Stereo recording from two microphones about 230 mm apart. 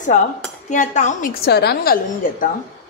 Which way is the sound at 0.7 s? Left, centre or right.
Left.